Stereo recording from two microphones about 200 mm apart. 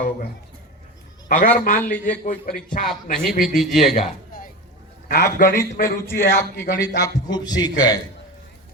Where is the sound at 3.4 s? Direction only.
Centre (ahead or behind).